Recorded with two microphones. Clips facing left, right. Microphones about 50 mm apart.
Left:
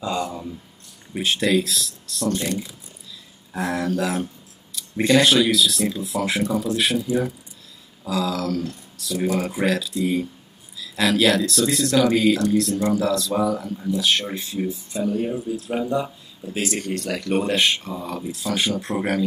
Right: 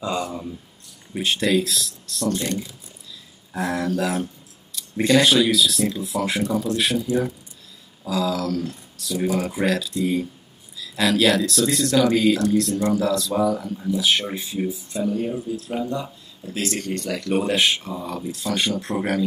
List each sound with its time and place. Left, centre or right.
0.0 s a sound: centre
1.1 s speech: centre
2.3 s speech: centre
3.5 s speech: centre
15.5 s speech: centre